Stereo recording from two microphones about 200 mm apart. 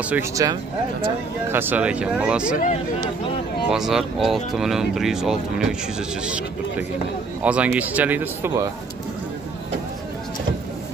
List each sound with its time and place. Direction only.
0.1 s speech: 15° right (ahead or behind)
2.5 s speech: 40° left (ahead or behind)
3.7 s speech: centre (ahead or behind)
7.4 s speech: 5° right (ahead or behind)